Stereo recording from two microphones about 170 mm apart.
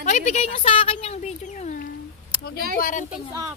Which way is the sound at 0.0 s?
45° left (ahead or behind).